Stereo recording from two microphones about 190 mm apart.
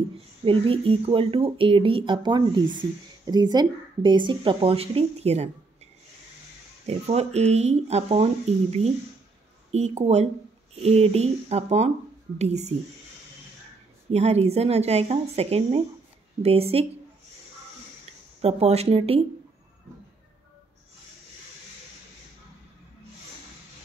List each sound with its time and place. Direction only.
0.5 s speech: 30° right (ahead or behind)
6.9 s speech: 35° right (ahead or behind)
14.1 s speech: 35° right (ahead or behind)
18.4 s speech: 35° right (ahead or behind)